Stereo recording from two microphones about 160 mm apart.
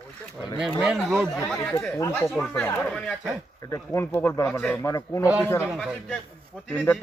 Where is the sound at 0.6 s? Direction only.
Centre (ahead or behind).